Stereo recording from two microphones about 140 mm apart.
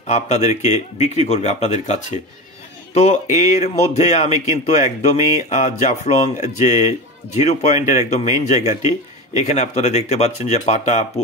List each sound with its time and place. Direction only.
0.0 s a man's voice: 55° left (ahead or behind)